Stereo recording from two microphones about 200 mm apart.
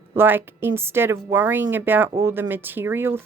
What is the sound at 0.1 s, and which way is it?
A woman's voice, 10° right (ahead or behind).